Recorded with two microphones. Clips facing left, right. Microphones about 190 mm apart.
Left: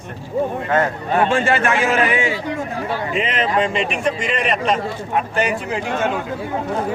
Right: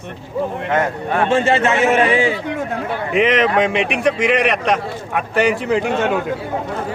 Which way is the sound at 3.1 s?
70° right (ahead or behind).